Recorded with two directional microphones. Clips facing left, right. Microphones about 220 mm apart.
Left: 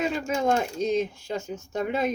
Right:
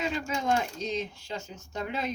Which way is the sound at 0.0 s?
45° left (ahead or behind).